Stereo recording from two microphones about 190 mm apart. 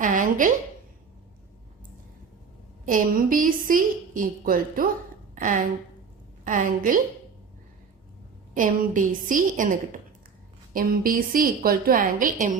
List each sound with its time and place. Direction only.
0.0 s a woman's voice: 45° right (ahead or behind)
2.8 s a woman's voice: 45° right (ahead or behind)
8.5 s a woman's voice: 45° right (ahead or behind)